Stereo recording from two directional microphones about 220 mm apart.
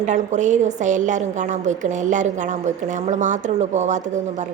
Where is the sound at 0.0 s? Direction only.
35° right (ahead or behind).